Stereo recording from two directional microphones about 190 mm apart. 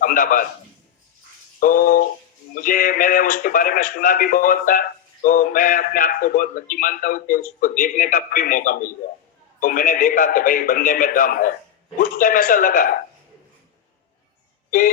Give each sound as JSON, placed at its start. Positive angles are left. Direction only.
{"t": 0.0, "sound": "a man's voice", "side_deg": 45}
{"t": 1.5, "sound": "speech", "side_deg": 45}